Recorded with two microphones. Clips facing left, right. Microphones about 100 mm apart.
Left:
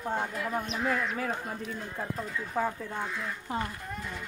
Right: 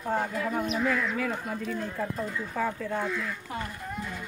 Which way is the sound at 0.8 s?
30° left (ahead or behind).